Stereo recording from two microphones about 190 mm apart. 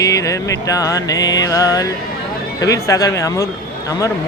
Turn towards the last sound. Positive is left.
turn(degrees=15)  # may be behind; listen again after turning